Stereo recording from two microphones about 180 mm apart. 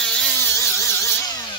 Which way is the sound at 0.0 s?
5° left (ahead or behind).